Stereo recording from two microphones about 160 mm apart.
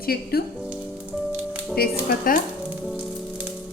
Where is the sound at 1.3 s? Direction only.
10° right (ahead or behind).